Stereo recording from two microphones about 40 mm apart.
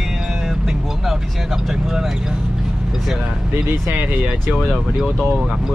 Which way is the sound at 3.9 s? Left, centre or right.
Right.